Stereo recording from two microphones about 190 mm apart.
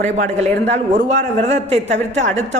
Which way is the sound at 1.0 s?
35° right (ahead or behind).